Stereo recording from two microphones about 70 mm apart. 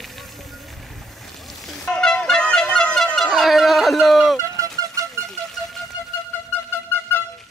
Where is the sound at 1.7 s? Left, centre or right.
Centre.